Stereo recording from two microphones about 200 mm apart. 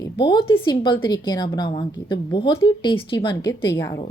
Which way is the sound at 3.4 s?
10° left (ahead or behind).